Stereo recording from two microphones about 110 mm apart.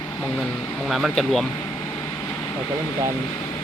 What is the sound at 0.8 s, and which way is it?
Speech, centre (ahead or behind).